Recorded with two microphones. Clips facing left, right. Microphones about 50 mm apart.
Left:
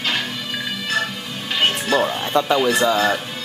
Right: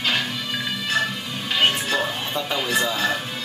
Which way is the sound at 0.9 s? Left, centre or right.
Centre.